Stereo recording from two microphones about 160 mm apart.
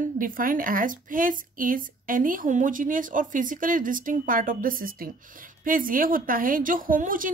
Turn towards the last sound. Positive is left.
turn(degrees=-55)  # may be behind; listen again after turning